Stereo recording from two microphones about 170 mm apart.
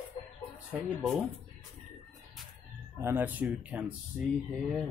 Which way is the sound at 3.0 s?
15° right (ahead or behind).